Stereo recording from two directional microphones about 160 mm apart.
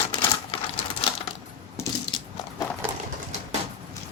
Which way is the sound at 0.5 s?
35° left (ahead or behind).